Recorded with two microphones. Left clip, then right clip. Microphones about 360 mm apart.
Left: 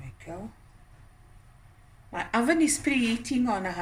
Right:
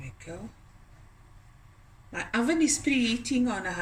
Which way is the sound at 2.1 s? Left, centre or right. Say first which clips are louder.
Left 2 dB; centre.